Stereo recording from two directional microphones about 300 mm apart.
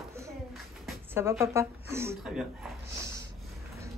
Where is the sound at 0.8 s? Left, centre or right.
Centre.